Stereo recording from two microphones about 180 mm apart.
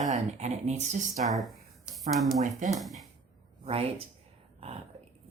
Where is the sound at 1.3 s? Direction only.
Centre (ahead or behind).